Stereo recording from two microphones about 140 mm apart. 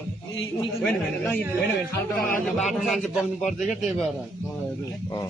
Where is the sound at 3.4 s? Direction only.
60° left (ahead or behind).